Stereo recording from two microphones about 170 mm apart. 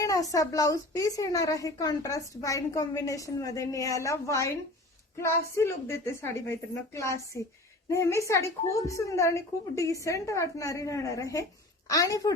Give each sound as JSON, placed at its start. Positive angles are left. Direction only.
{"t": 0.0, "sound": "a woman's voice", "side_deg": 20}